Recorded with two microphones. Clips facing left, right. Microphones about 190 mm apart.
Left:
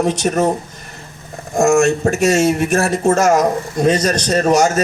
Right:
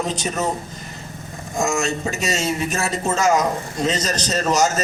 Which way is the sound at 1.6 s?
60° left (ahead or behind).